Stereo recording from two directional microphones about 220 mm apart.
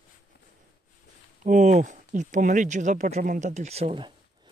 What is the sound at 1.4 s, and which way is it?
Speech, 35° right (ahead or behind).